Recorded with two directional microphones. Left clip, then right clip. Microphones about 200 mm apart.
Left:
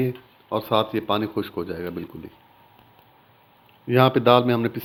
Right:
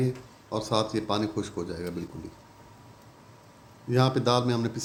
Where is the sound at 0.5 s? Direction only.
30° left (ahead or behind).